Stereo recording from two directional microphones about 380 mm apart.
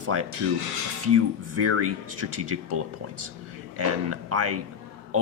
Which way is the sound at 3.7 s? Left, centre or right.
Right.